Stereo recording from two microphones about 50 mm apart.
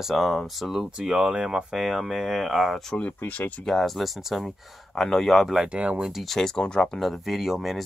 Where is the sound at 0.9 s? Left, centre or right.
Centre.